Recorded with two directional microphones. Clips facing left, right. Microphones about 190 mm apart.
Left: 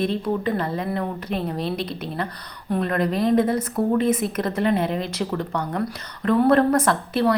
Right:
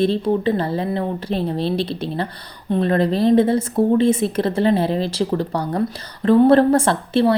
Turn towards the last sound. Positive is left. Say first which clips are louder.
# right 4 dB
turn(degrees=-30)  # may be behind; listen again after turning